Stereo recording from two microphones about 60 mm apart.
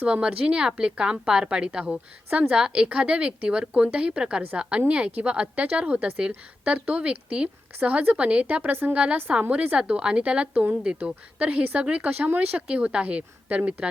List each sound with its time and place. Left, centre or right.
0.0 s a woman's voice: centre